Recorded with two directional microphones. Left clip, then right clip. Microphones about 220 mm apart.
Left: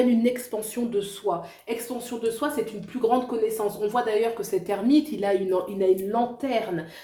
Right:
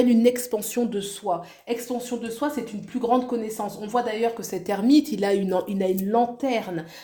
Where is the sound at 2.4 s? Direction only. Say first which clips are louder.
Right 5 dB; 40° right (ahead or behind).